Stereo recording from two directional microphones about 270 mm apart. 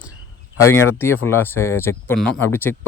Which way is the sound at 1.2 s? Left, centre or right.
Centre.